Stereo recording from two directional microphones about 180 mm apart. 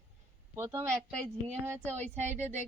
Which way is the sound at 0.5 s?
15° right (ahead or behind).